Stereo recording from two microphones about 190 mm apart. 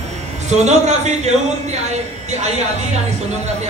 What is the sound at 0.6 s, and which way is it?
Speech, 35° right (ahead or behind).